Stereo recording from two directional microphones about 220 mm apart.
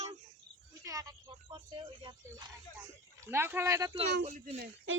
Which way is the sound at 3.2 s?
10° right (ahead or behind).